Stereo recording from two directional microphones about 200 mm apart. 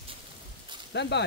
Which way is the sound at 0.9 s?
60° left (ahead or behind).